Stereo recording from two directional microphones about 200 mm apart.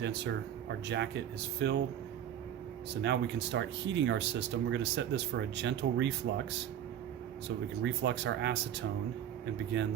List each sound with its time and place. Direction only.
0.9 s speech: 60° right (ahead or behind)
2.9 s speech: 60° right (ahead or behind)
7.8 s speech: 60° right (ahead or behind)
9.8 s speech: 60° right (ahead or behind)